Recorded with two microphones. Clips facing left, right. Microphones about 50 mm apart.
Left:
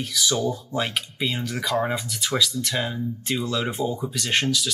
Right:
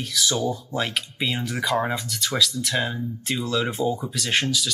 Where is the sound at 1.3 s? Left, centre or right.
Right.